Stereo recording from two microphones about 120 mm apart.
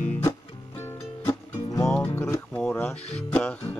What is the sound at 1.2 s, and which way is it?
Music, 25° left (ahead or behind).